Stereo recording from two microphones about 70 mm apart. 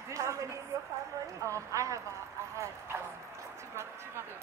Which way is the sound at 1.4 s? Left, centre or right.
Right.